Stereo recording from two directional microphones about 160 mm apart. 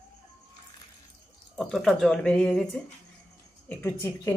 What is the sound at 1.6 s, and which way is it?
Speech, centre (ahead or behind).